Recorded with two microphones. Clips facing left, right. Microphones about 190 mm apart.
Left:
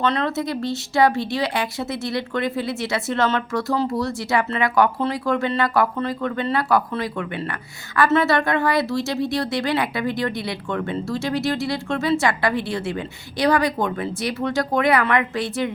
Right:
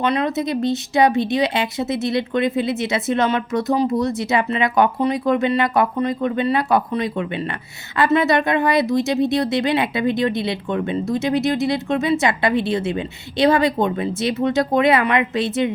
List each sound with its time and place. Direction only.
0.0 s speech: 15° right (ahead or behind)